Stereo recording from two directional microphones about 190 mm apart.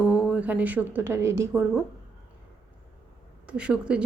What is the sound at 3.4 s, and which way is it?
Speech, 5° right (ahead or behind).